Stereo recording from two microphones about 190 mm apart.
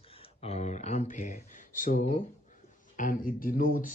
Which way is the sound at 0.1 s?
30° left (ahead or behind).